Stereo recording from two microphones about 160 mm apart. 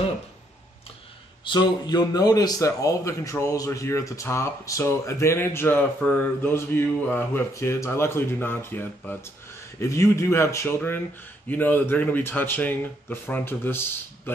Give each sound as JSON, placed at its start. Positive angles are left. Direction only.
{"t": 1.4, "sound": "speech", "side_deg": 30}